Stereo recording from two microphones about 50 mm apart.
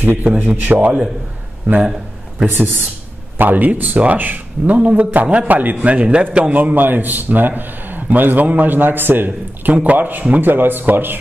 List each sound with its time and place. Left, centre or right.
0.0 s a man's voice: right
2.4 s a man's voice: right
6.5 s a man's voice: right